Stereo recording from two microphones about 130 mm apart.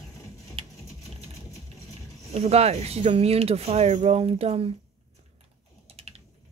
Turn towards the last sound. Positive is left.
turn(degrees=-50)  # may be behind; listen again after turning